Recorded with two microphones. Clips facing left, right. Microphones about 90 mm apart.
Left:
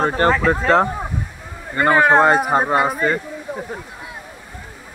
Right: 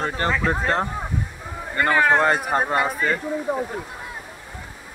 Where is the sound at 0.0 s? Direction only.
55° left (ahead or behind); by 0.8 s 90° left.